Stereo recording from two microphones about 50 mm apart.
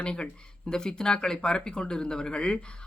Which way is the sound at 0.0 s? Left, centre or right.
Centre.